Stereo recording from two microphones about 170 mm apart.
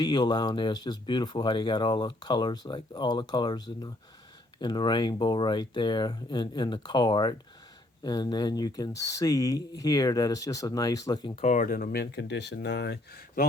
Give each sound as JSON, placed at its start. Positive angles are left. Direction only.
{"t": 0.0, "sound": "speech", "side_deg": 25}
{"t": 11.4, "sound": "speech", "side_deg": 50}